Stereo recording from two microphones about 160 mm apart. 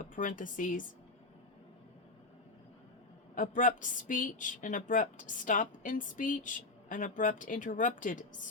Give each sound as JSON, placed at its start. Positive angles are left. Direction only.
{"t": 0.0, "sound": "a woman's voice", "side_deg": 55}
{"t": 3.3, "sound": "a woman's voice", "side_deg": 55}